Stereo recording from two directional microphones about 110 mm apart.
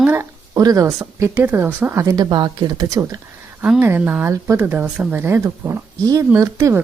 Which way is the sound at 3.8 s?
20° right (ahead or behind).